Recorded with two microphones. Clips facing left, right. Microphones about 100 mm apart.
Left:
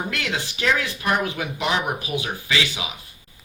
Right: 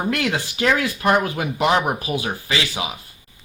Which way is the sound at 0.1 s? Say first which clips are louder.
Right 5 dB; 40° right (ahead or behind).